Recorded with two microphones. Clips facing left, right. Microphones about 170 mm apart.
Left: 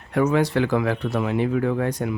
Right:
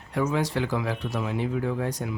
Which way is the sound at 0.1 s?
65° left (ahead or behind).